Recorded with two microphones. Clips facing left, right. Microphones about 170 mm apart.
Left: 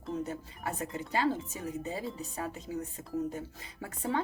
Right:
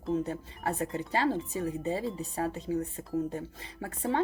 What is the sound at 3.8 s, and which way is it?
Speech, 30° right (ahead or behind).